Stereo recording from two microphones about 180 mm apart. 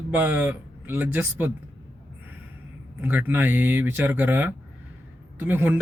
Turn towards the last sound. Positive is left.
turn(degrees=-10)  # may be behind; listen again after turning